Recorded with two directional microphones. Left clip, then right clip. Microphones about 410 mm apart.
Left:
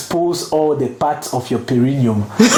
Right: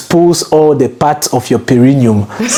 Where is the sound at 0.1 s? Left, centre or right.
Right.